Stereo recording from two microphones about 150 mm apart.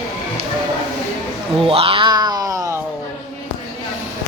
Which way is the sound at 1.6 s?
40° right (ahead or behind).